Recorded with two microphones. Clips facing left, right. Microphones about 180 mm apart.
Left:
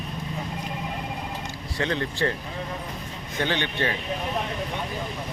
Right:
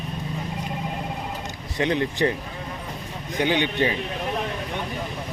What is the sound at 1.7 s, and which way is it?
Speech, 15° right (ahead or behind).